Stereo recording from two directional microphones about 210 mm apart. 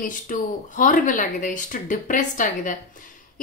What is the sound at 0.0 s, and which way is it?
Speech, 40° left (ahead or behind).